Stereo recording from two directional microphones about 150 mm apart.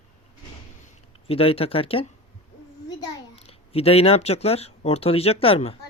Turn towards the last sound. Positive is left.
turn(degrees=40)  # may be behind; listen again after turning